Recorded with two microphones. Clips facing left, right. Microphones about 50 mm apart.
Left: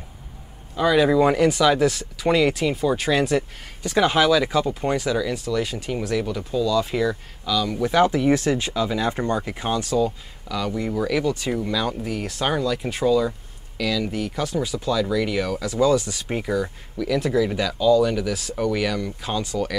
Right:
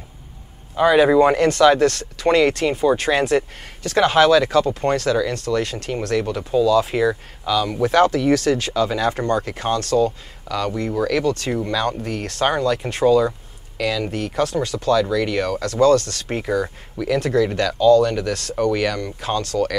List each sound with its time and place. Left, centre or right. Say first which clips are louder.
0.7 s speech: right 4 dB; centre
1.2 s speech: right 3 dB; centre
3.8 s speech: right 4 dB; centre
7.9 s speech: right 2 dB; centre
14.1 s speech: right 4 dB; centre
16.4 s speech: right 4 dB; centre
17.2 s speech: right 3 dB; centre
19.4 s speech: right 5 dB; centre